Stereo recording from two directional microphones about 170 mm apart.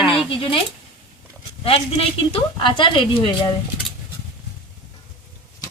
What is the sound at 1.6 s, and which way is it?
Speech, 35° left (ahead or behind).